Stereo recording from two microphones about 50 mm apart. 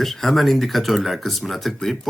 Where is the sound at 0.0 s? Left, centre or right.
Centre.